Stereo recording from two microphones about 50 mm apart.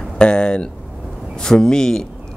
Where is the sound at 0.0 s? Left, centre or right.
Centre.